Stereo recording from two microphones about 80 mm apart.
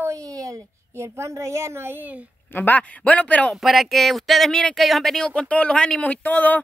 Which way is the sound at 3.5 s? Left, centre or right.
Centre.